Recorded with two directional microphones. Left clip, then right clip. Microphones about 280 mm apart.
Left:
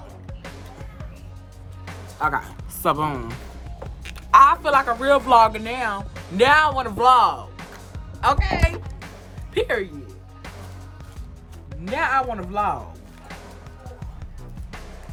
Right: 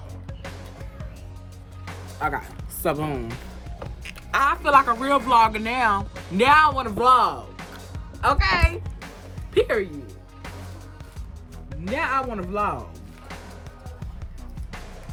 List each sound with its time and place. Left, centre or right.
0.3 s music: centre
2.1 s speech: left
2.8 s speech: left
4.7 s speech: centre
11.7 s speech: centre
13.2 s music: centre